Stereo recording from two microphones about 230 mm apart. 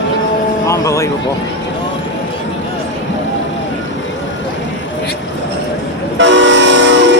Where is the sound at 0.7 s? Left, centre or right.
Centre.